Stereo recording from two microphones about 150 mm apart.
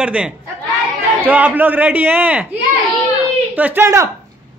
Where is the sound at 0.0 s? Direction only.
5° right (ahead or behind).